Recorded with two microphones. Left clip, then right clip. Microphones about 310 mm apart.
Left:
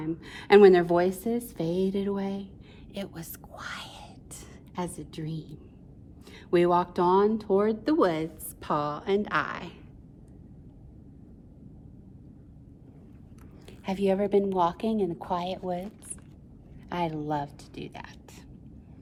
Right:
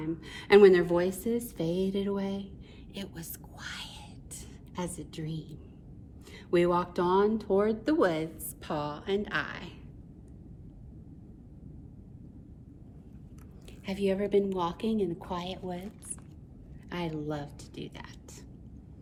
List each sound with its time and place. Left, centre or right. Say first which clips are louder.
0.0 s speech: left 2 dB; centre
13.8 s speech: left 4 dB; centre
16.9 s speech: left 6 dB; centre